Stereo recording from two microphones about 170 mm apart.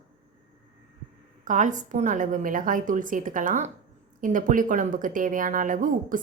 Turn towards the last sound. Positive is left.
turn(degrees=-50)  # may be behind; listen again after turning